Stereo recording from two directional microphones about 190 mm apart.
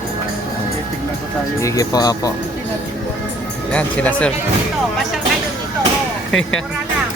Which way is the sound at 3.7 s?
10° left (ahead or behind).